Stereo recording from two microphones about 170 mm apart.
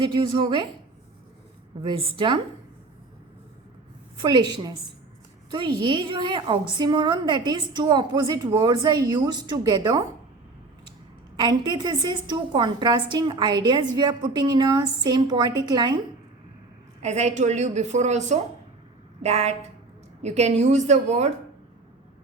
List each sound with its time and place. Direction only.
0.0 s a woman's voice: 30° right (ahead or behind)
1.8 s a woman's voice: 30° right (ahead or behind)
4.2 s a woman's voice: 25° right (ahead or behind)
11.3 s a woman's voice: 25° right (ahead or behind)
17.0 s a woman's voice: 40° right (ahead or behind)